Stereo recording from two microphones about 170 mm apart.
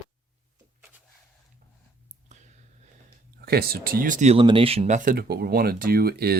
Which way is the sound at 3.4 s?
65° right (ahead or behind).